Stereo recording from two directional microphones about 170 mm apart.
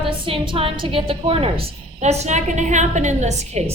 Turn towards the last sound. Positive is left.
turn(degrees=-40)  # may be behind; listen again after turning